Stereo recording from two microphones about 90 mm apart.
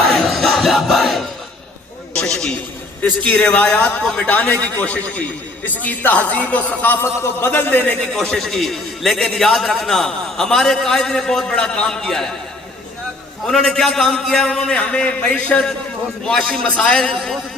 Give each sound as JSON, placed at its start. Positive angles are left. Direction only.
{"t": 0.1, "sound": "crowd", "side_deg": 5}
{"t": 2.1, "sound": "a man's voice", "side_deg": 5}
{"t": 4.0, "sound": "a man's voice", "side_deg": 5}
{"t": 8.1, "sound": "a man's voice", "side_deg": 5}
{"t": 13.5, "sound": "a man's voice", "side_deg": 5}